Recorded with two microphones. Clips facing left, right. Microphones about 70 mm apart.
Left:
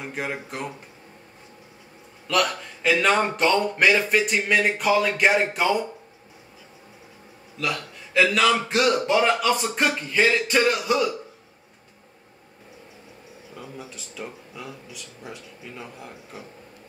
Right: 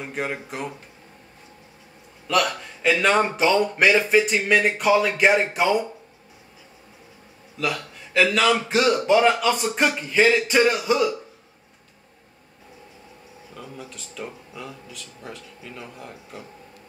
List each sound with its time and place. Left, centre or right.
0.0 s a man's voice: centre
2.2 s a man's voice: centre
7.5 s a man's voice: centre
13.6 s a man's voice: centre